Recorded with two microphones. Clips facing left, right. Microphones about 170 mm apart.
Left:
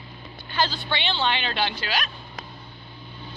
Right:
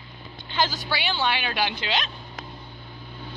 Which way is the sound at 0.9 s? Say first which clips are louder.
Even; 10° right (ahead or behind).